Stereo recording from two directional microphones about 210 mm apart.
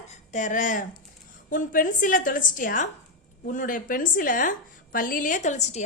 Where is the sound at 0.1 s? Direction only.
35° left (ahead or behind).